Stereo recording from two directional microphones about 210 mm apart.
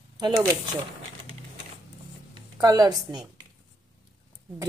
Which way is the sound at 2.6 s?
20° right (ahead or behind).